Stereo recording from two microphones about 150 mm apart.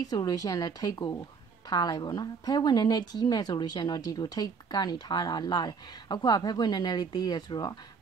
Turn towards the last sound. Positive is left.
turn(degrees=30)  # may be behind; listen again after turning